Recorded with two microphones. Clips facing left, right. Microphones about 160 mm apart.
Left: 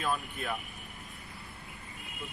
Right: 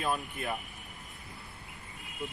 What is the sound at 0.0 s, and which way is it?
Speech, 20° right (ahead or behind).